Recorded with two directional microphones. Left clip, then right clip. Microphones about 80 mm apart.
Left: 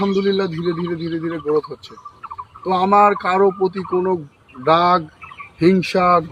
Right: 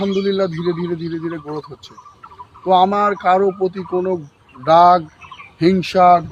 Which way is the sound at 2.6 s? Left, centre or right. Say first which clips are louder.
Even; right.